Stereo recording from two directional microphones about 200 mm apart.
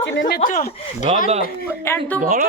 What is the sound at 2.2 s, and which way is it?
Speech, 40° right (ahead or behind).